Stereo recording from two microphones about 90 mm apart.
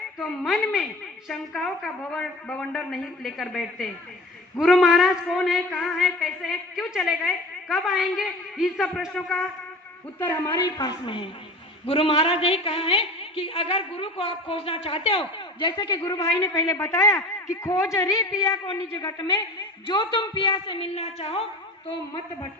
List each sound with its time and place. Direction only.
0.2 s a woman's voice: centre (ahead or behind)
11.0 s a woman's voice: 75° left (ahead or behind)
11.9 s a woman's voice: 90° left